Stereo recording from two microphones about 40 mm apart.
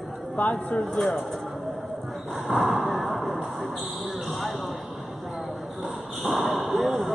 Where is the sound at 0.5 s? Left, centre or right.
Centre.